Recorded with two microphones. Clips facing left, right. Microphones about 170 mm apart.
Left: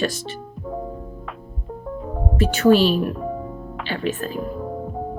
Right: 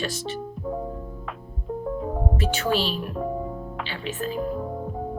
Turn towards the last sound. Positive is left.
turn(degrees=50)  # may be behind; listen again after turning